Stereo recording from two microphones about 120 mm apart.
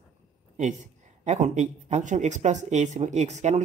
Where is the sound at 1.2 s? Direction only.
80° right.